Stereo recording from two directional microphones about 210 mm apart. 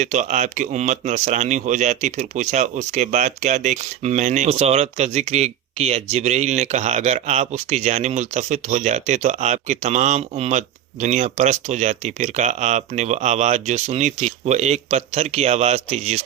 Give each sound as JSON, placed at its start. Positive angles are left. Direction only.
{"t": 0.0, "sound": "speech", "side_deg": -35}